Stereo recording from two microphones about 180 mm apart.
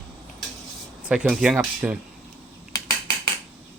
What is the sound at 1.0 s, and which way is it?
Speech, 5° right (ahead or behind).